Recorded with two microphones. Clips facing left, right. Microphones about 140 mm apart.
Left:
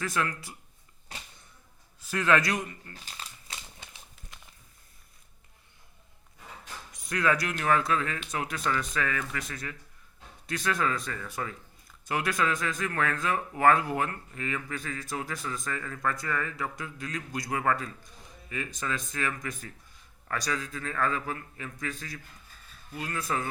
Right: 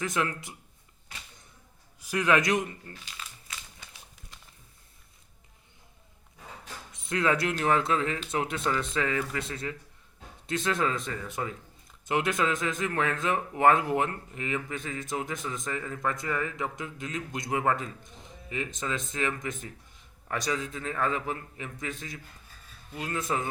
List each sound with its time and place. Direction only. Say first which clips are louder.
0.0 s speech: right 1 dB; 20° right (ahead or behind)
2.0 s a man's voice: even; 15° right (ahead or behind)
2.9 s crumpling: even; 40° left (ahead or behind)
6.9 s speech: right 1 dB; 25° right (ahead or behind)